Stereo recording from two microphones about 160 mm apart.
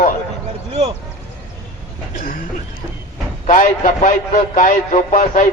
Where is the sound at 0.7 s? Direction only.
35° right (ahead or behind).